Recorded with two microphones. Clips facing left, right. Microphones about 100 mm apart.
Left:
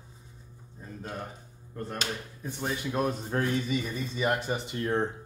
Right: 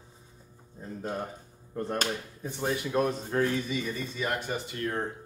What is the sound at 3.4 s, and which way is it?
Speech, 15° left (ahead or behind).